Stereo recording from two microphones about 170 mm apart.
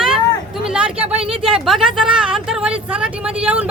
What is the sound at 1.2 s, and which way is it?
Speech, 30° right (ahead or behind).